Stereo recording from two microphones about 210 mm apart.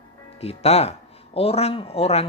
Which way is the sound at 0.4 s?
30° left (ahead or behind).